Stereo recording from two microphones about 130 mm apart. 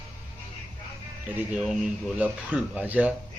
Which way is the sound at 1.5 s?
5° right (ahead or behind).